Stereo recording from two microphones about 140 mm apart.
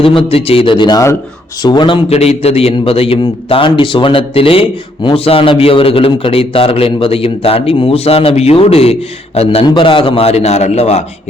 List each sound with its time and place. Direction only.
0.0 s a man's voice: 40° left (ahead or behind)